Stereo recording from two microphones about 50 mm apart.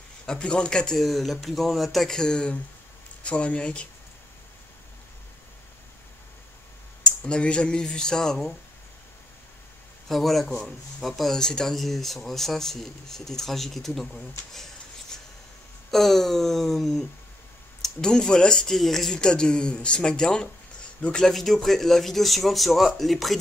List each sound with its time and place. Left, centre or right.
0.3 s speech: centre
0.9 s speech: centre
2.1 s speech: centre
7.0 s speech: centre
10.0 s speech: centre
11.3 s speech: centre
17.8 s speech: centre
21.3 s speech: centre